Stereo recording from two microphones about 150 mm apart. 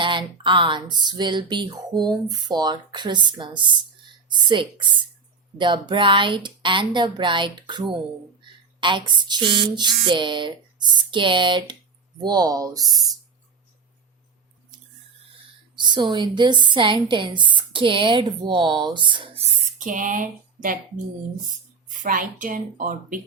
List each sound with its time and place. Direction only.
0.0 s speech: 35° right (ahead or behind)
15.7 s speech: 30° right (ahead or behind)
19.8 s speech: 60° right (ahead or behind)
21.8 s speech: 60° right (ahead or behind)